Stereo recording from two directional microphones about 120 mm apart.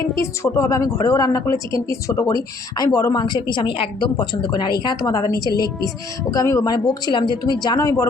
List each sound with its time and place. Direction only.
0.2 s a woman's voice: 25° left (ahead or behind)